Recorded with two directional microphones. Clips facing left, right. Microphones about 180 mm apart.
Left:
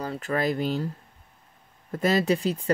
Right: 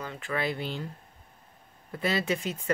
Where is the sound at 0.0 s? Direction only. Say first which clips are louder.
Left 5 dB; 40° left (ahead or behind).